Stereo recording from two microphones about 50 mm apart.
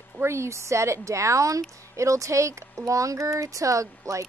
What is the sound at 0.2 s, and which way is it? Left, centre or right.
A woman's voice, right.